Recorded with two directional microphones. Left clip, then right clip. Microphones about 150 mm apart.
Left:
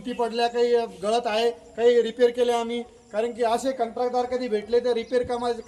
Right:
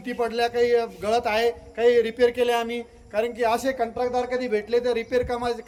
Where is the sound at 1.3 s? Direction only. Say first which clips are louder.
Right 1 dB; 45° right (ahead or behind).